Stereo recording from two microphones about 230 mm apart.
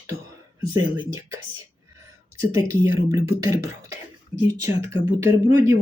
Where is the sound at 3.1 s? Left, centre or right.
Centre.